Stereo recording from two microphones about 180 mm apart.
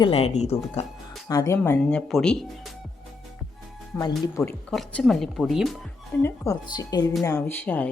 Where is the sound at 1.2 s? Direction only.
20° left (ahead or behind); by 2.7 s 5° left (ahead or behind).